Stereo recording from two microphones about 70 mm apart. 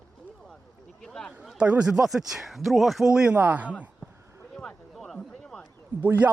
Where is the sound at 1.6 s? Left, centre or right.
Centre.